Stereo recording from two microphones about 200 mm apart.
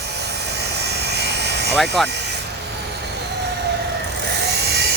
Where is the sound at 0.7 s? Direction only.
55° right (ahead or behind).